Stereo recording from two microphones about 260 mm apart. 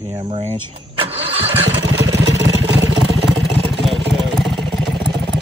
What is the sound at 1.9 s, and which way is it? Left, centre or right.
Vehicle, right.